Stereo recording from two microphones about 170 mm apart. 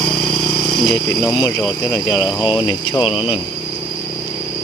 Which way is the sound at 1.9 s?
15° left (ahead or behind).